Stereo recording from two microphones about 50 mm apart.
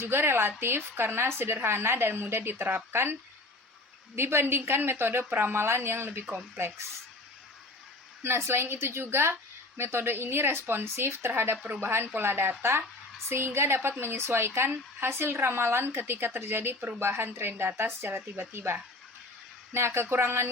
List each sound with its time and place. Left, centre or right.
0.0 s speech: right
4.1 s speech: right
5.5 s a woman's voice: right
6.3 s speech: right
8.2 s a woman's voice: right
11.5 s speech: right
11.8 s a woman's voice: right